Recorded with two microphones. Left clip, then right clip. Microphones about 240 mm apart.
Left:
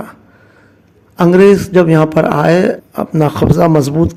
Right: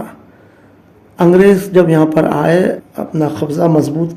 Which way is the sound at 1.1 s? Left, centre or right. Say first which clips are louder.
Left 1 dB; left.